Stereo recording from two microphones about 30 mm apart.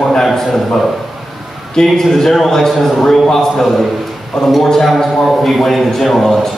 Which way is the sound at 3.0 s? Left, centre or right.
Centre.